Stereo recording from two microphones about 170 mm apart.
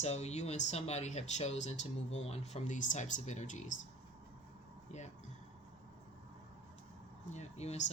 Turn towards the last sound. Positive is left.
turn(degrees=40)  # may be behind; listen again after turning